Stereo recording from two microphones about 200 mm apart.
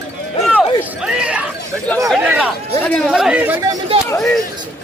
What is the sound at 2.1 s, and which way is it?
Chatter, 5° right (ahead or behind).